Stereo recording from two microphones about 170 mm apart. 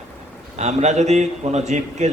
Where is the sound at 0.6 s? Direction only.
40° right (ahead or behind).